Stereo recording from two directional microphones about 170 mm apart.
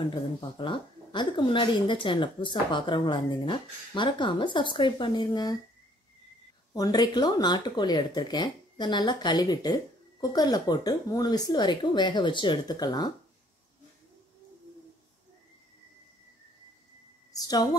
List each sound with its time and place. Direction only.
0.1 s a woman's voice: 30° left (ahead or behind)
6.7 s a woman's voice: 20° left (ahead or behind)
17.3 s speech: 20° left (ahead or behind)